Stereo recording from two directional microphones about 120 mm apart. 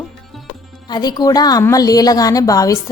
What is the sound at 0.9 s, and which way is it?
A woman's voice, 35° left (ahead or behind).